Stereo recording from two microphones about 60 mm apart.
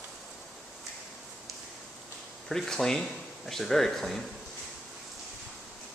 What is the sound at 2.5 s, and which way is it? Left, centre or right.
Speech, centre.